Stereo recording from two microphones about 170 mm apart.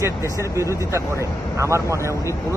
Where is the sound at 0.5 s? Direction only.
15° right (ahead or behind).